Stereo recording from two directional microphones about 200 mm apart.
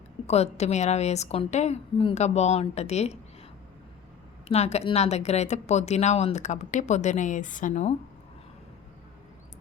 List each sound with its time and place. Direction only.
0.3 s speech: 30° left (ahead or behind)
4.4 s speech: 30° left (ahead or behind)